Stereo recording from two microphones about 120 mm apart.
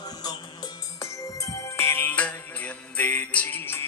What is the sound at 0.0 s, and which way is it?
Music, 35° left (ahead or behind).